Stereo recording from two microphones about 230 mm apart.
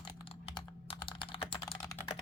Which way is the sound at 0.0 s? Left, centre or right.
Left.